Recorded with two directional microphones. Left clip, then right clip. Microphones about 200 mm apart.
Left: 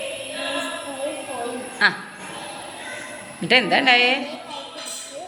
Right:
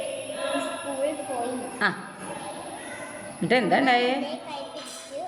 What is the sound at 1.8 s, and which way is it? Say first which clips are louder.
Speech: left 7 dB; 15° right (ahead or behind).